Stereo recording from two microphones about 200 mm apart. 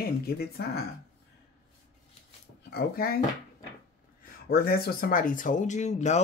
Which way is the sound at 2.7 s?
50° left (ahead or behind).